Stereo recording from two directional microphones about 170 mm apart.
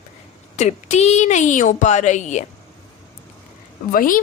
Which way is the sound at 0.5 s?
40° left (ahead or behind).